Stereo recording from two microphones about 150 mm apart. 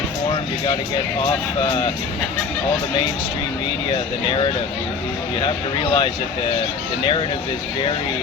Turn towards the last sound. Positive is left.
turn(degrees=35)  # may be behind; listen again after turning